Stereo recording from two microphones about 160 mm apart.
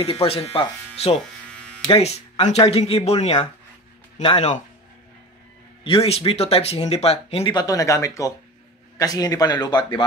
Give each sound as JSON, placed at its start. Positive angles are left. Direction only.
{"t": 0.0, "sound": "speech", "side_deg": 40}
{"t": 5.9, "sound": "speech", "side_deg": 40}
{"t": 7.5, "sound": "speech", "side_deg": 20}